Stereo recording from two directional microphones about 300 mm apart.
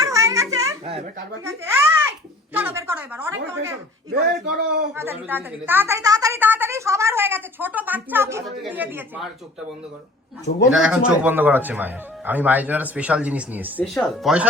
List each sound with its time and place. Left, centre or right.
0.0 s babbling: centre
1.5 s a child's voice: centre
4.4 s a man's voice: right
4.9 s a woman's voice: centre
10.7 s speech: centre